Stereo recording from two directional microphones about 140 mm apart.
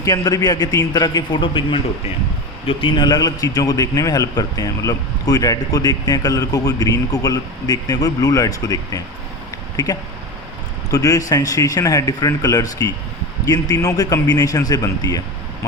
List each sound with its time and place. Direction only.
0.0 s a man's voice: 25° left (ahead or behind)